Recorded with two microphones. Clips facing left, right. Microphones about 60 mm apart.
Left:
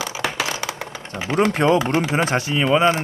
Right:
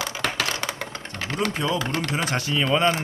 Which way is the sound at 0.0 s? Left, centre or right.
Centre.